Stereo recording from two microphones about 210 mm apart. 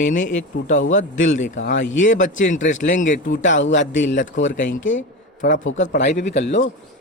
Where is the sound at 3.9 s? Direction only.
35° left (ahead or behind).